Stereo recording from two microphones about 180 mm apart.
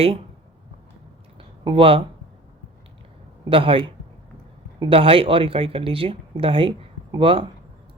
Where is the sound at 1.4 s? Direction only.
30° right (ahead or behind).